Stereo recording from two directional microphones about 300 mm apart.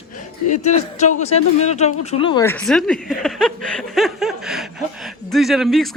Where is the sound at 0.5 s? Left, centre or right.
Left.